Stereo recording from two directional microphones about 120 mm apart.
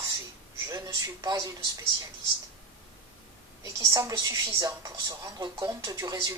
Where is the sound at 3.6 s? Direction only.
30° right (ahead or behind).